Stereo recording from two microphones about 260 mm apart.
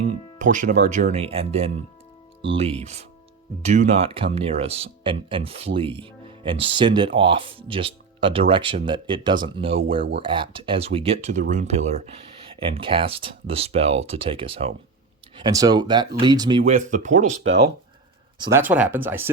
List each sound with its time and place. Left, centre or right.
0.1 s speech: right
18.3 s speech: centre
18.6 s speech: centre